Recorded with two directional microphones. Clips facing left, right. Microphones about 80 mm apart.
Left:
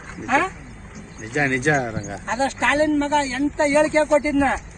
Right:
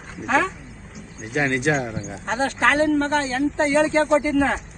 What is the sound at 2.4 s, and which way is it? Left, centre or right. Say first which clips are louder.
Speech: even; right.